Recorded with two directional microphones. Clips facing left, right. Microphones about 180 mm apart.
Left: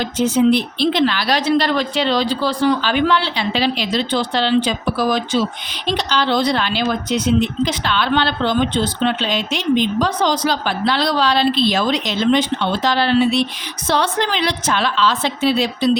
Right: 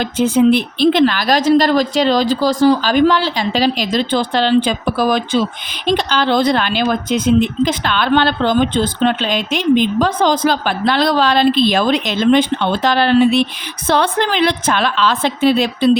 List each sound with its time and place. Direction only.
0.0 s a woman's voice: 55° right (ahead or behind)